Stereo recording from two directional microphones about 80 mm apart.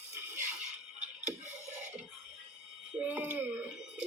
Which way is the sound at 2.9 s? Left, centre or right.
Centre.